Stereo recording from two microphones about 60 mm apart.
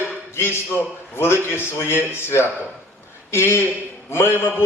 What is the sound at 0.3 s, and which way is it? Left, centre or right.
A man's voice, left.